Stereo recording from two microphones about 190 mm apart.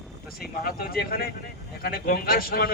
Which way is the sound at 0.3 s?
50° left (ahead or behind).